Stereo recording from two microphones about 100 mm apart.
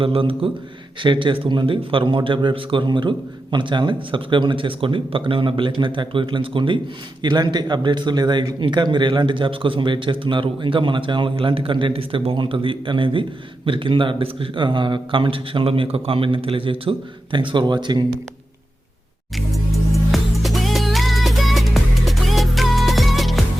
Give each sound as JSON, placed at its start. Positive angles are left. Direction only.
{"t": 0.0, "sound": "a man's voice", "side_deg": -65}
{"t": 7.2, "sound": "a man's voice", "side_deg": -45}
{"t": 17.5, "sound": "speech", "side_deg": -50}
{"t": 19.5, "sound": "music", "side_deg": 0}